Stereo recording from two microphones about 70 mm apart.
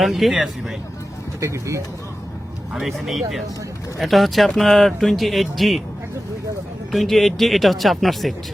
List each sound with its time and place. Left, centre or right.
0.0 s speech: centre
1.4 s speech: right
2.7 s speech: centre
6.9 s speech: centre